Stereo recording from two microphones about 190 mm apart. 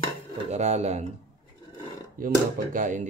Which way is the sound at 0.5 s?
35° right (ahead or behind).